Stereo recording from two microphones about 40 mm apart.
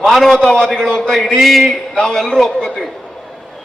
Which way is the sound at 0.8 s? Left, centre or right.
Centre.